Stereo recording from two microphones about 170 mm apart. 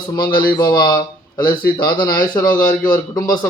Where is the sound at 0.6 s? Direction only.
25° left (ahead or behind).